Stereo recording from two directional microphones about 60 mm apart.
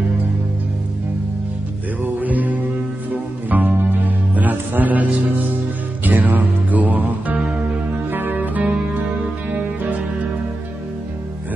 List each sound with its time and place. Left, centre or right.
2.0 s music: right
6.0 s music: right